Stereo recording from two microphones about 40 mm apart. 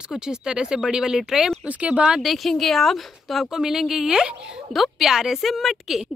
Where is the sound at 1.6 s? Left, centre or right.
Right.